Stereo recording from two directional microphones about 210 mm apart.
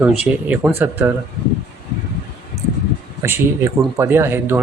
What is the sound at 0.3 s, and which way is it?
Speech, 5° right (ahead or behind).